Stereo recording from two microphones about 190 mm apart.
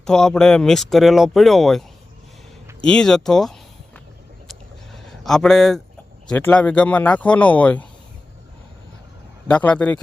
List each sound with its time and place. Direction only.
0.0 s speech: 5° left (ahead or behind)
2.8 s speech: 5° left (ahead or behind)
4.4 s a sound: centre (ahead or behind)
6.2 s speech: 5° left (ahead or behind)
9.5 s speech: 5° left (ahead or behind)